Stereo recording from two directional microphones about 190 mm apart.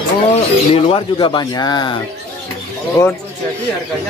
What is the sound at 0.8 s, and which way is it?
Speech, 25° left (ahead or behind).